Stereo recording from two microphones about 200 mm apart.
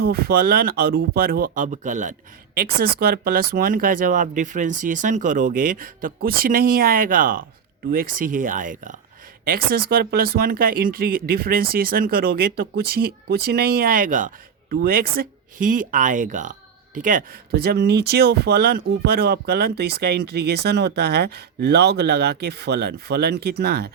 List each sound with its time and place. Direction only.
0.0 s speech: 50° right (ahead or behind)